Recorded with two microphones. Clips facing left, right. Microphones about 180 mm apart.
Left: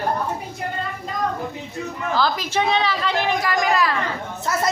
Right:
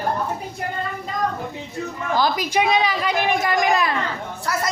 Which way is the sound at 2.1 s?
15° right (ahead or behind).